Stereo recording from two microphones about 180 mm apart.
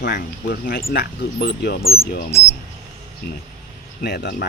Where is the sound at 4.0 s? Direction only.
60° left (ahead or behind).